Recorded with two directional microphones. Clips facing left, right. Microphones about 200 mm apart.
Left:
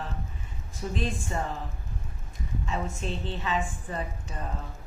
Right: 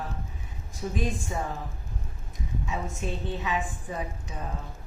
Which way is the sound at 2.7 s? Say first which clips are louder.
Left 1 dB; 15° right (ahead or behind).